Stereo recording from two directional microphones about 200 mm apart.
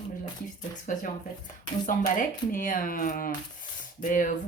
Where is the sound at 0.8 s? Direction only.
40° left (ahead or behind).